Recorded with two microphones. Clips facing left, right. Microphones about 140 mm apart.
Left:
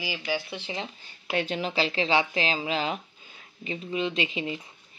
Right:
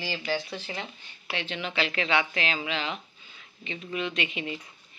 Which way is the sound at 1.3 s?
40° left (ahead or behind).